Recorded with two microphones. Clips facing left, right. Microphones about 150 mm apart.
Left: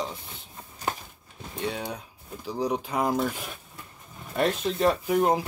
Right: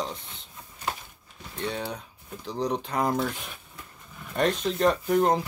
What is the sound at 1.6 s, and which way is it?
Speech, 10° left (ahead or behind).